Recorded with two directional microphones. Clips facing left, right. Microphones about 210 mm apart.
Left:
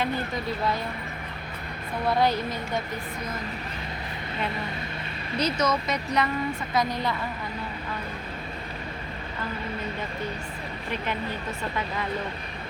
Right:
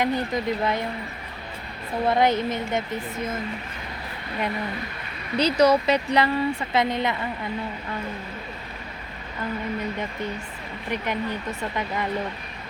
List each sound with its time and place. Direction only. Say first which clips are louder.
0.0 s speech: right 4 dB; 20° right (ahead or behind)
2.0 s speech: right 3 dB; 20° right (ahead or behind)
5.4 s speech: right 7 dB; 30° right (ahead or behind)